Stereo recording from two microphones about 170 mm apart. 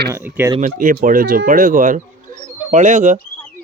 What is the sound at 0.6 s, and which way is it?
Speech, 50° right (ahead or behind).